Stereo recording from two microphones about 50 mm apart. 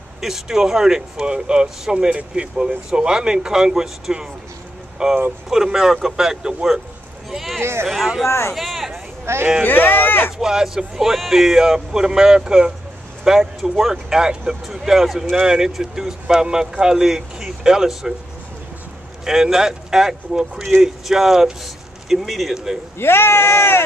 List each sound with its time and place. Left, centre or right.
0.2 s speech: centre
8.3 s speech: left
8.5 s a sound: centre
9.2 s speech: right
9.7 s speech: left
10.4 s a man's voice: centre
19.2 s speech: centre
22.9 s speech: left